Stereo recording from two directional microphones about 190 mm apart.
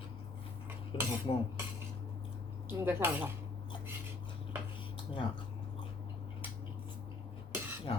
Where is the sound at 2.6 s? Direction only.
10° right (ahead or behind).